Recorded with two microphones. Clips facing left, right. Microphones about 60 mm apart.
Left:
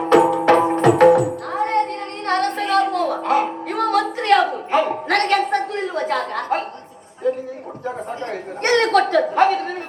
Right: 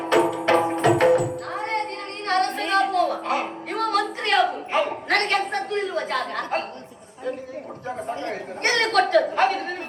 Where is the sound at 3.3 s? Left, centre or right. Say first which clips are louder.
Left 6 dB; left.